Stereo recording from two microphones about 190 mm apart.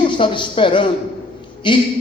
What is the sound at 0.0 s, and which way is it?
A man's voice, 25° left (ahead or behind).